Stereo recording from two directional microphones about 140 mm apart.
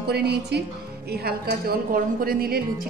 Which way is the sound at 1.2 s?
90° right.